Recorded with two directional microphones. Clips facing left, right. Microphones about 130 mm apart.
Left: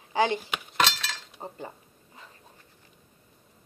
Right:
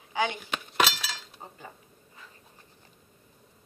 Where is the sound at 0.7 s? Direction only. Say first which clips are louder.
Even; 5° right (ahead or behind).